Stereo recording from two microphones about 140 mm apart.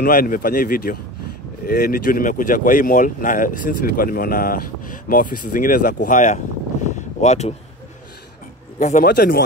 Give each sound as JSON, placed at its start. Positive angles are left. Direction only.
{"t": 0.0, "sound": "speech", "side_deg": 90}
{"t": 7.2, "sound": "speech", "side_deg": 55}
{"t": 8.7, "sound": "speech", "side_deg": 65}